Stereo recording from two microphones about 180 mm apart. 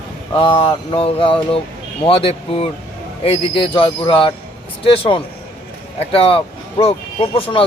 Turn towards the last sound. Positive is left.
turn(degrees=30)  # may be behind; listen again after turning